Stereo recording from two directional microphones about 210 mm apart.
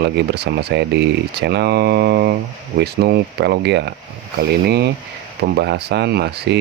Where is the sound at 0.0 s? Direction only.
50° right (ahead or behind).